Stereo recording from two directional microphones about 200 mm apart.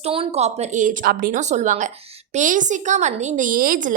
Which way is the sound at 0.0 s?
30° right (ahead or behind).